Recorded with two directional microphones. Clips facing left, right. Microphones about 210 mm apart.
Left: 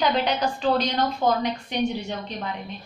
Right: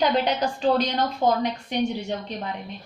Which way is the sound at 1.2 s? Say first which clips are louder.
Right 1 dB; 15° right (ahead or behind).